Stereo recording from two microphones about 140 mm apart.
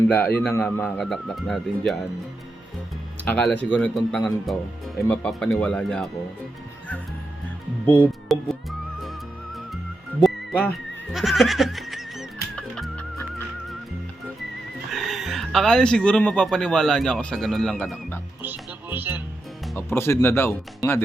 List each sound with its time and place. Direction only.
0.1 s a man's voice: 10° left (ahead or behind)
3.2 s speech: 10° left (ahead or behind)
7.9 s speech: 10° left (ahead or behind)
10.7 s music: centre (ahead or behind)
14.8 s speech: centre (ahead or behind)
18.4 s speech: 15° right (ahead or behind)
19.7 s speech: 15° left (ahead or behind)